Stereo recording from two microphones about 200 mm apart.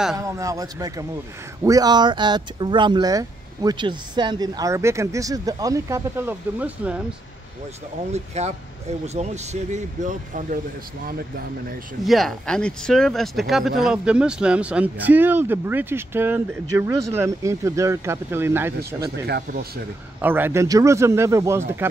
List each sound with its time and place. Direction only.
0.2 s speech: 15° right (ahead or behind)
8.1 s speech: 35° right (ahead or behind)
12.0 s speech: centre (ahead or behind)
19.2 s speech: 55° right (ahead or behind)
20.2 s speech: 10° right (ahead or behind)